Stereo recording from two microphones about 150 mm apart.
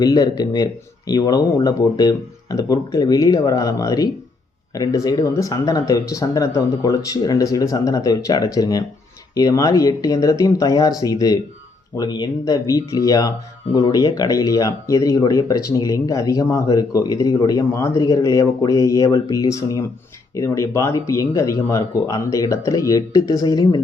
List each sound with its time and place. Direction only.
0.0 s speech: 25° left (ahead or behind)